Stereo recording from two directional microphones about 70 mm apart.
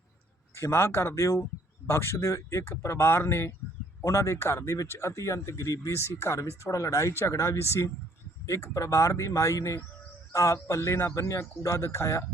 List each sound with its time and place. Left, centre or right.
0.5 s speech: left